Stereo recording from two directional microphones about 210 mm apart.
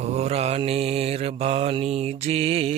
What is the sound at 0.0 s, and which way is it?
Mantra, 30° right (ahead or behind).